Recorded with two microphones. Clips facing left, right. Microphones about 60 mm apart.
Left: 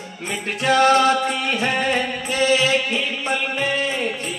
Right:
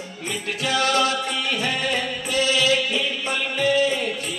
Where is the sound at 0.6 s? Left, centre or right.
Left.